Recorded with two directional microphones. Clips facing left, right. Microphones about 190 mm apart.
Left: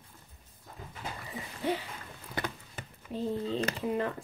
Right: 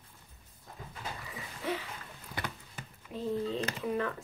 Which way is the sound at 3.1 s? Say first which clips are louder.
Left 4 dB; 30° left (ahead or behind).